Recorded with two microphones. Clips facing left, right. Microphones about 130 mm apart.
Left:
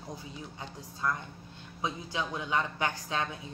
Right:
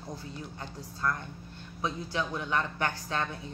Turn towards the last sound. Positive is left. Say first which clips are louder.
# even
turn(degrees=15)  # may be behind; listen again after turning